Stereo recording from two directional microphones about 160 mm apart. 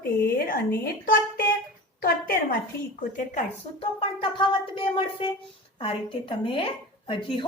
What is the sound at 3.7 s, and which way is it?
Speech, 30° left (ahead or behind).